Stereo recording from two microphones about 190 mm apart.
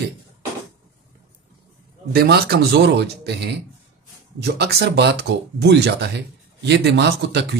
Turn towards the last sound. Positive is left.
turn(degrees=-65)  # may be behind; listen again after turning